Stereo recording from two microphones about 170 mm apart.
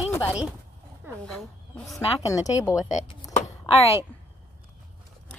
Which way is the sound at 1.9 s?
20° left (ahead or behind).